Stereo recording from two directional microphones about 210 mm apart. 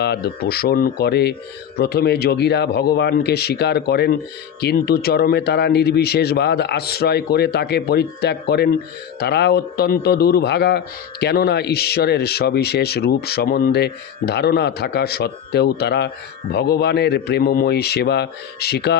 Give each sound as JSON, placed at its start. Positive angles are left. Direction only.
{"t": 0.0, "sound": "a man's voice", "side_deg": 50}